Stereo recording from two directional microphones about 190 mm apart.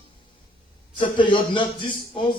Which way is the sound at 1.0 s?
25° left (ahead or behind).